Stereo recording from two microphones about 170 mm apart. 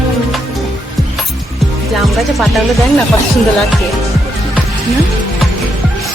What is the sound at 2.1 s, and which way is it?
Music, centre (ahead or behind).